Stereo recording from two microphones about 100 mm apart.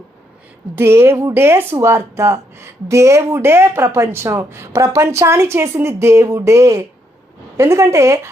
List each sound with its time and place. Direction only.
0.8 s speech: 25° right (ahead or behind)